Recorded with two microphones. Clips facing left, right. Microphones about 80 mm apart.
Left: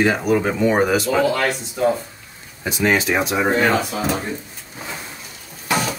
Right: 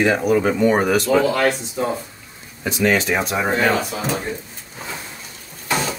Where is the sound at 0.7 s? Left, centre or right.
Centre.